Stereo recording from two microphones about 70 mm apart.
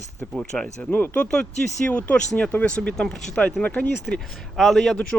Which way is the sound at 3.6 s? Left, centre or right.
Left.